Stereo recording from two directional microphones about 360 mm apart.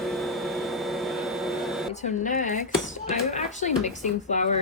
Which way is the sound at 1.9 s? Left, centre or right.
Centre.